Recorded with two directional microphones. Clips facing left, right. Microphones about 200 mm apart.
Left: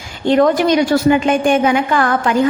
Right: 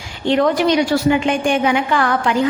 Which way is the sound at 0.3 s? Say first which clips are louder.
Left 3 dB; 45° left (ahead or behind).